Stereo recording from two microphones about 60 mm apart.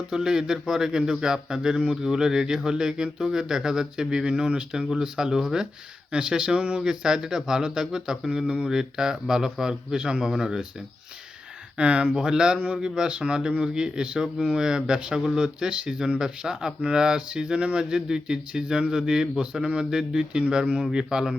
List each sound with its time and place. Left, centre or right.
0.1 s speech: centre
11.8 s speech: right